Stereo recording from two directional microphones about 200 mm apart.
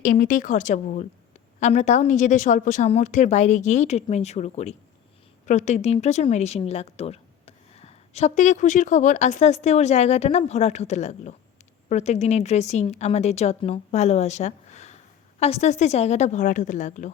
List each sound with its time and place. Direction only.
0.0 s a woman's voice: 40° left (ahead or behind)